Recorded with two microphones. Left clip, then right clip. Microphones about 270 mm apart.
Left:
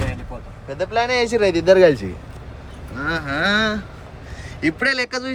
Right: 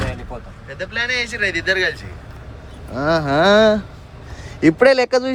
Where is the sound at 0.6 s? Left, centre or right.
Centre.